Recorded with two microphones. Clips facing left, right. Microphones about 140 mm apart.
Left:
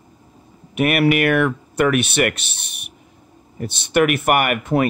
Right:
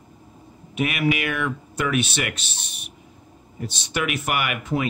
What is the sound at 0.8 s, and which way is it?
Speech, 60° left (ahead or behind).